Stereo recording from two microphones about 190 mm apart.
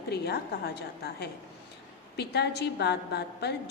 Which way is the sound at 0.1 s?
60° left (ahead or behind).